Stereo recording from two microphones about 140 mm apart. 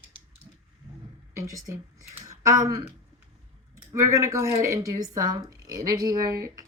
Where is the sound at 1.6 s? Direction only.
25° right (ahead or behind).